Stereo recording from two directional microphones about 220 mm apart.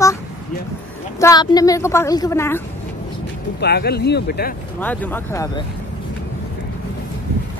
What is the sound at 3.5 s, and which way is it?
Speech, 45° left (ahead or behind).